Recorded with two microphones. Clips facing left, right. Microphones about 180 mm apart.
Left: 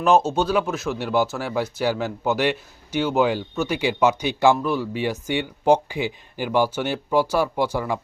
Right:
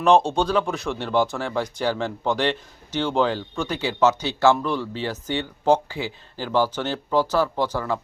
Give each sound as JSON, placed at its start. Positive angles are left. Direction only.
{"t": 0.0, "sound": "speech", "side_deg": 5}